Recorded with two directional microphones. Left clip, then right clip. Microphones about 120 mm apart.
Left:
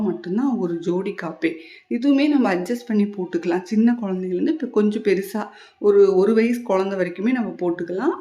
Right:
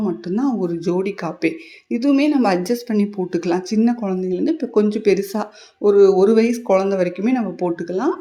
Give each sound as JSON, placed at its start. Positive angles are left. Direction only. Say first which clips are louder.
{"t": 0.0, "sound": "speech", "louder": "right 2 dB", "side_deg": -15}